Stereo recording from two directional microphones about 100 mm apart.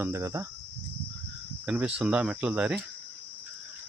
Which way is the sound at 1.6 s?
10° right (ahead or behind).